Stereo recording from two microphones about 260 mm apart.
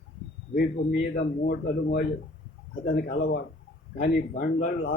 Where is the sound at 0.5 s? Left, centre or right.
Left.